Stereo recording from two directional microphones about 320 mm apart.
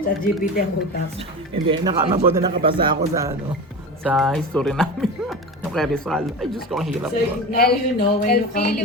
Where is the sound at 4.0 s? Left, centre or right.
Centre.